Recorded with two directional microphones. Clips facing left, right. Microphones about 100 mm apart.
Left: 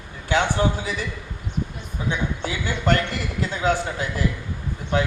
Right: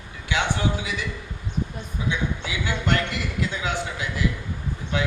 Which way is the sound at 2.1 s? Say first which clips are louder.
Left 2 dB; 40° left (ahead or behind).